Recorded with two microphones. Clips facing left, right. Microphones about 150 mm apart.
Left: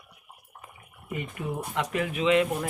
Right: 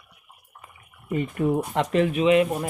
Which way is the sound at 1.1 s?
40° right (ahead or behind).